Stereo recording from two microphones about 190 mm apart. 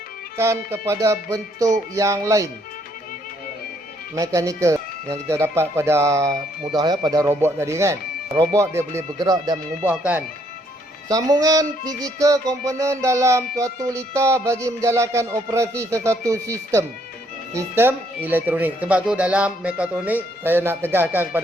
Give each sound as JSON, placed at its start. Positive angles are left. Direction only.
{"t": 0.3, "sound": "music", "side_deg": -15}
{"t": 4.1, "sound": "music", "side_deg": -15}